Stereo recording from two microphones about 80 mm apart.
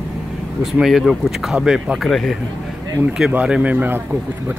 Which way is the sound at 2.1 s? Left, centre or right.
Centre.